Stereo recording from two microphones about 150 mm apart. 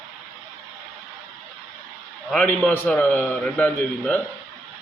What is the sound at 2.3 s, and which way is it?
A man's voice, 5° left (ahead or behind).